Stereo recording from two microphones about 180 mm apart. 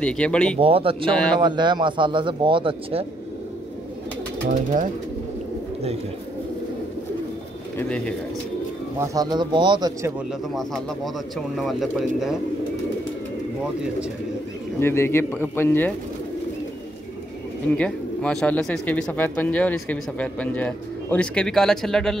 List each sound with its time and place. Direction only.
0.0 s speech: 5° left (ahead or behind)
0.6 s speech: 30° right (ahead or behind)
9.0 s speech: 20° right (ahead or behind)
10.5 s speech: centre (ahead or behind)
14.8 s speech: 15° left (ahead or behind)
17.7 s speech: 5° left (ahead or behind)